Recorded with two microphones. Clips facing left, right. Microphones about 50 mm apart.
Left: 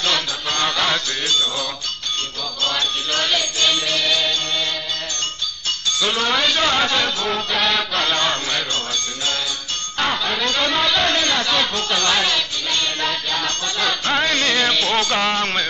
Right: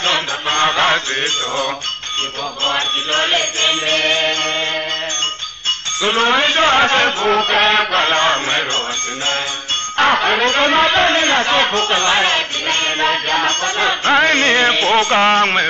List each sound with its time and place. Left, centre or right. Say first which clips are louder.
0.0 s fowl: right 4 dB; right
2.6 s speech: right 3 dB; right
6.0 s speech: right 6 dB; right
9.9 s speech: right 8 dB; right